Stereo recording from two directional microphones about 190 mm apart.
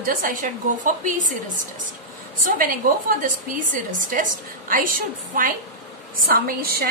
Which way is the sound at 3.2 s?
45° right (ahead or behind).